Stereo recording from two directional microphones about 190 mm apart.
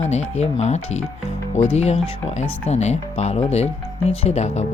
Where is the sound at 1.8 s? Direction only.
35° left (ahead or behind).